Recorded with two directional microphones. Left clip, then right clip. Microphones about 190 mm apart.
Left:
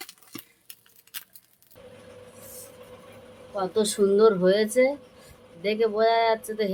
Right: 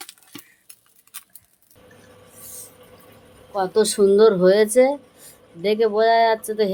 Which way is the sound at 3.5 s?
35° right (ahead or behind).